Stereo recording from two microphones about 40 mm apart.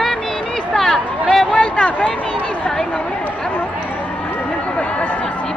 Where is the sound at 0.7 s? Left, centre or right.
Centre.